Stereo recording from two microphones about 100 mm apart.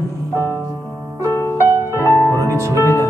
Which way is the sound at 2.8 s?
30° left (ahead or behind).